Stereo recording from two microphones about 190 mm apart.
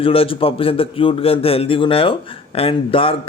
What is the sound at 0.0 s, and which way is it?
Speech, 30° left (ahead or behind).